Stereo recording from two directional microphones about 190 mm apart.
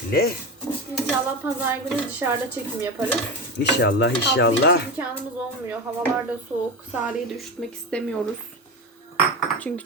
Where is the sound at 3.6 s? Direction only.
65° left (ahead or behind).